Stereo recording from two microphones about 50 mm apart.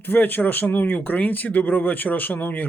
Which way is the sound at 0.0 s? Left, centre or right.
Left.